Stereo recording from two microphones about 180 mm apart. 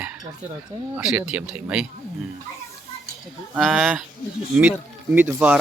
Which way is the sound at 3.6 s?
Centre (ahead or behind).